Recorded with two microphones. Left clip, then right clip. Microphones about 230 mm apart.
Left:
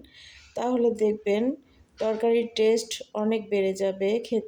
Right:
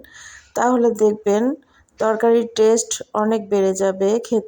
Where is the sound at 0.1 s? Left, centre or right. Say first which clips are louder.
Right 9 dB; right.